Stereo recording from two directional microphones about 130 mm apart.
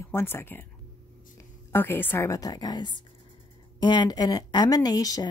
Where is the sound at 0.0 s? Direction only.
20° left (ahead or behind).